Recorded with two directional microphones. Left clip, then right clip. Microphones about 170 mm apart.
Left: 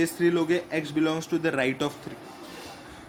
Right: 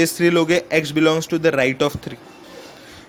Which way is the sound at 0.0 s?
50° right (ahead or behind).